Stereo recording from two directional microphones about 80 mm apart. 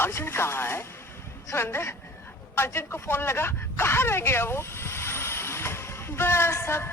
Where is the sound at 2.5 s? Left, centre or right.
Left.